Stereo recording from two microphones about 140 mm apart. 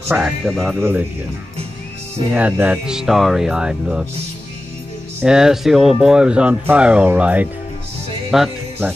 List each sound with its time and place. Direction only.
0.1 s speech: 5° right (ahead or behind)
0.7 s speech: 15° right (ahead or behind)
2.3 s speech: 10° right (ahead or behind)
5.2 s speech: 5° right (ahead or behind)